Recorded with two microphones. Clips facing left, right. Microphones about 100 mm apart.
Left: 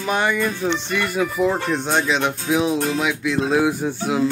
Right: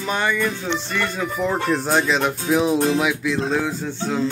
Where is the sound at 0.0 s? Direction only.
15° left (ahead or behind).